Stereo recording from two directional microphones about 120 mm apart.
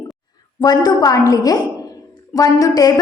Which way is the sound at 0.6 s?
35° left (ahead or behind).